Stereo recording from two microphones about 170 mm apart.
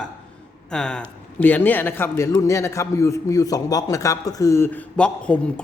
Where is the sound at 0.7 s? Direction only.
5° left (ahead or behind).